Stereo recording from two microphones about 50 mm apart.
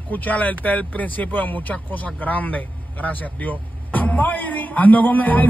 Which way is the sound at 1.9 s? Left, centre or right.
Left.